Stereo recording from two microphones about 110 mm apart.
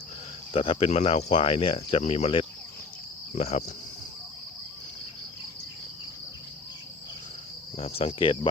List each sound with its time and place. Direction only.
0.5 s speech: 55° left (ahead or behind)
0.9 s speech: 70° left (ahead or behind)
3.3 s cricket: 75° left (ahead or behind)
7.8 s speech: 70° left (ahead or behind)